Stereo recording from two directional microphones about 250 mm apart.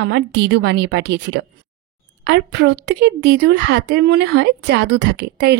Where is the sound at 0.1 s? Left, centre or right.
Right.